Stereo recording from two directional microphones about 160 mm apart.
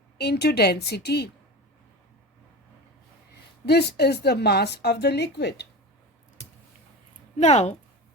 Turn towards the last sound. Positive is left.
turn(degrees=45)  # may be behind; listen again after turning